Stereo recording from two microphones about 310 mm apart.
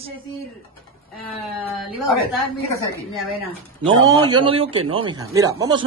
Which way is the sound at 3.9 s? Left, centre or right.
Centre.